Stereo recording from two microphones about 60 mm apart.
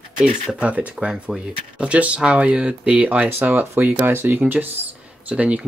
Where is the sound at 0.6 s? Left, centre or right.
Right.